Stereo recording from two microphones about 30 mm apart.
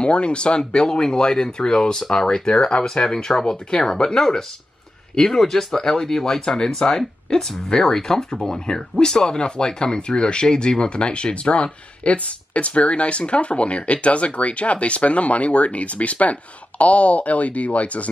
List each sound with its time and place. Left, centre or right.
0.0 s speech: left